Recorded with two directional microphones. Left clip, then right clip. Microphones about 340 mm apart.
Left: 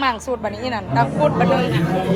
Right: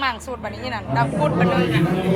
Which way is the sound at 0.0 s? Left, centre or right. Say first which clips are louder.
Left 4 dB; centre.